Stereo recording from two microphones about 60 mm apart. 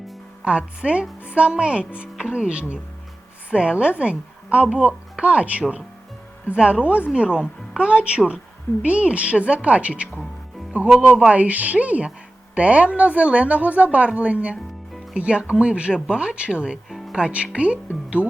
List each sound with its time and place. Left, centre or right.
0.4 s a woman's voice: centre